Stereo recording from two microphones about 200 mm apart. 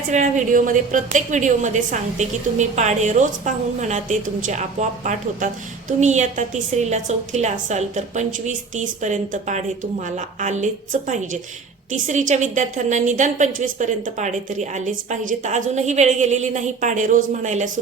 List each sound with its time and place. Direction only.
0.1 s a woman's voice: 40° right (ahead or behind)